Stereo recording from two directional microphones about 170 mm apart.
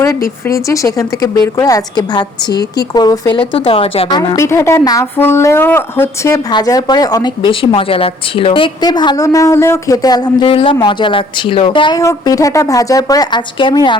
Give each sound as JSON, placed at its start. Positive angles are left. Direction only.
{"t": 0.0, "sound": "speech", "side_deg": 15}
{"t": 4.4, "sound": "speech", "side_deg": 15}